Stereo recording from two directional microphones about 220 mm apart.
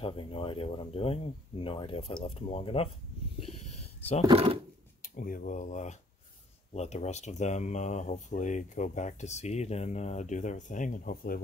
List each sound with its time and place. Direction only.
0.0 s speech: 25° left (ahead or behind)
4.3 s speech: 25° right (ahead or behind)
5.1 s speech: 35° left (ahead or behind)